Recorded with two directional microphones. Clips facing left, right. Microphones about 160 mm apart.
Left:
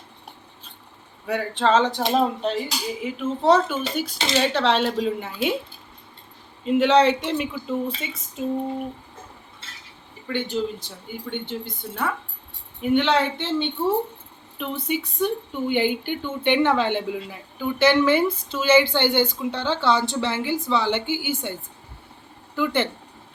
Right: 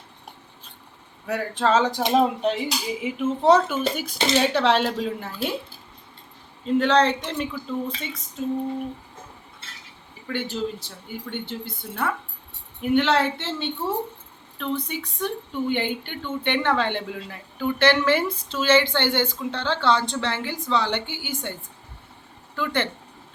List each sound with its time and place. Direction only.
1.3 s speech: 5° right (ahead or behind)
4.8 s speech: centre (ahead or behind)
6.7 s speech: 10° left (ahead or behind)
10.2 s speech: 5° right (ahead or behind)
22.5 s speech: 10° left (ahead or behind)